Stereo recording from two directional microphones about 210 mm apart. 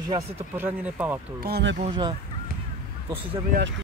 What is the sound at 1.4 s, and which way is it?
Speech, 55° right (ahead or behind).